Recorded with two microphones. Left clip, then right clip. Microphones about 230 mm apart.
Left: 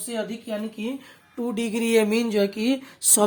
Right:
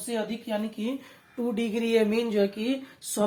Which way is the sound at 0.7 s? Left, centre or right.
Left.